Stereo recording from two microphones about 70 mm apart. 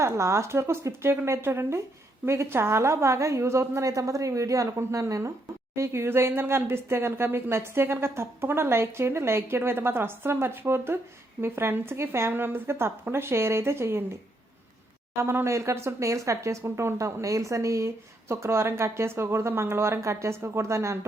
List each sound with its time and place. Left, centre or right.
0.0 s a woman's voice: right
15.2 s speech: right